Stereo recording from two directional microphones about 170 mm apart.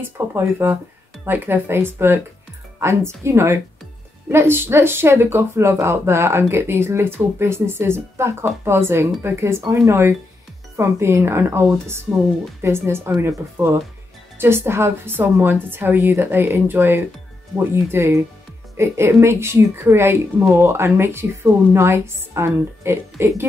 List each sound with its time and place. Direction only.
0.0 s speech: 15° right (ahead or behind)